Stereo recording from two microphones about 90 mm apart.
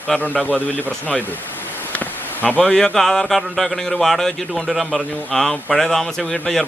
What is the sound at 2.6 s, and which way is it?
Speech, 10° left (ahead or behind).